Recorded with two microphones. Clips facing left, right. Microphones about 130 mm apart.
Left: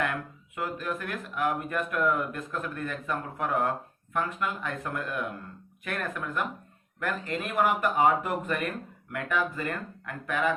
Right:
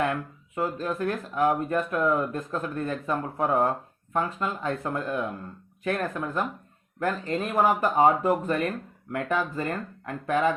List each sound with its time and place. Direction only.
0.0 s speech: 30° right (ahead or behind)